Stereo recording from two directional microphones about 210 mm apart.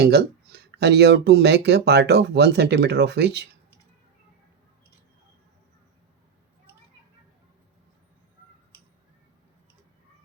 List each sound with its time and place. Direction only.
0.0 s speech: 50° right (ahead or behind)